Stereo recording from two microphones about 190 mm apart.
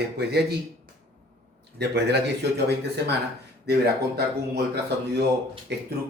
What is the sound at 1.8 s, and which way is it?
Speech, 60° right (ahead or behind).